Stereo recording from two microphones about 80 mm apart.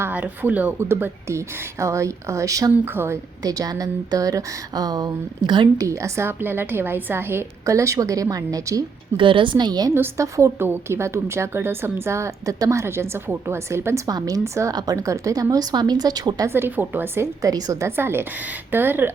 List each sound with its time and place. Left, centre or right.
0.1 s a woman's voice: centre
1.4 s a woman's voice: right
2.8 s a woman's voice: right
3.4 s speech: right
5.7 s a woman's voice: right
7.6 s speech: right
9.1 s a woman's voice: right
10.2 s a woman's voice: right
14.1 s speech: right
14.7 s speech: right
16.5 s a woman's voice: right
17.4 s speech: right
17.8 s a woman's voice: right